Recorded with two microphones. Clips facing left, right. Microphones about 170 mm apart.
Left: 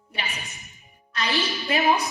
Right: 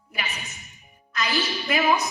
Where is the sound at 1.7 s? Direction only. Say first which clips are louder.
Even; 30° left (ahead or behind).